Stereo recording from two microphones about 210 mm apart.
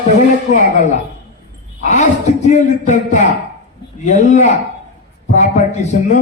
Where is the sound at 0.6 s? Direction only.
35° left (ahead or behind).